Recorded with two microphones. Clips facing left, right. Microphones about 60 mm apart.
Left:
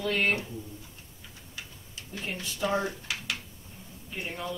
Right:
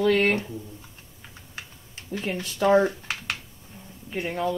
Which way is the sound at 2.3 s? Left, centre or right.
Right.